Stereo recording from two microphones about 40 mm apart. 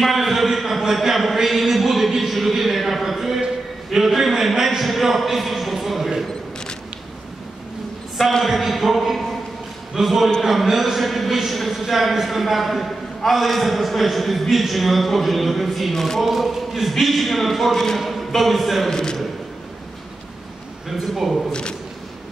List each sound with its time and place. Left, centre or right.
0.0 s a sound: centre
8.2 s a man's voice: centre
8.5 s a man's voice: centre
16.3 s a man's voice: centre
18.9 s a man's voice: centre
20.9 s a man's voice: centre
21.5 s speech: left